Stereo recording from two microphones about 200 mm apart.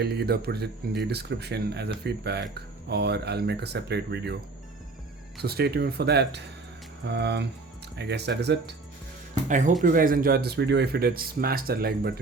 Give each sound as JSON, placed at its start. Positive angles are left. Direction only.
{"t": 0.0, "sound": "speech", "side_deg": -55}
{"t": 5.4, "sound": "speech", "side_deg": -55}
{"t": 9.5, "sound": "speech", "side_deg": -40}